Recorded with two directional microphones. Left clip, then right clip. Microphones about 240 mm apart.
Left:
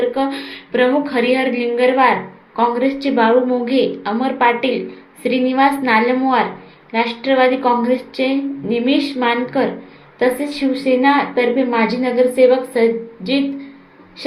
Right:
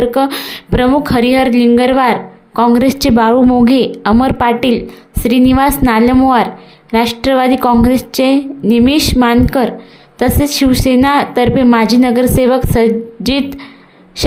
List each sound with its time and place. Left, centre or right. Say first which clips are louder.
0.1 s speech: right 6 dB; right